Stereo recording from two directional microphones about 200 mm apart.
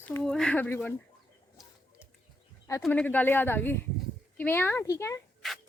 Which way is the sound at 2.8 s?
5° left (ahead or behind).